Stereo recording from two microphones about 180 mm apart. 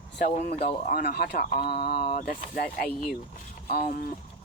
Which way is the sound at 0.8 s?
60° left (ahead or behind).